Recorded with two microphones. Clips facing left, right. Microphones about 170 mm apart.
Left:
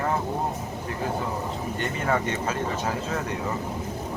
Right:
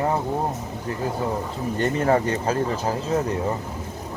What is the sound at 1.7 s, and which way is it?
Speech, 35° right (ahead or behind).